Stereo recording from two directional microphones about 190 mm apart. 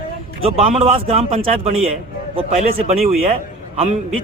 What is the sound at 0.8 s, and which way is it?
Speech, 30° right (ahead or behind).